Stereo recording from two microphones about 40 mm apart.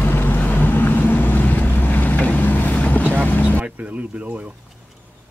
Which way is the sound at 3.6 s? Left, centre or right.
Right.